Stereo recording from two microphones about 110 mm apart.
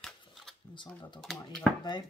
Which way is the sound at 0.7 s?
45° left (ahead or behind).